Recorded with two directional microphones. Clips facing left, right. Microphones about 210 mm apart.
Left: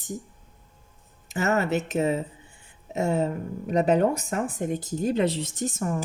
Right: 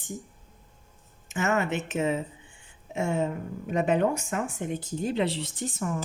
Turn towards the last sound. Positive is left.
turn(degrees=45)  # may be behind; listen again after turning